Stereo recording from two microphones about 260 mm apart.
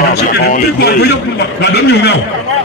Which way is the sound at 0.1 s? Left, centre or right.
Left.